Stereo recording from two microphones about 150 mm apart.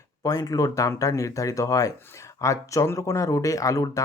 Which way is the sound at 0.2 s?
25° left (ahead or behind).